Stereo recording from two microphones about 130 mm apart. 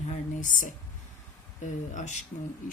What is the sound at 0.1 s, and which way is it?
Speech, 80° left.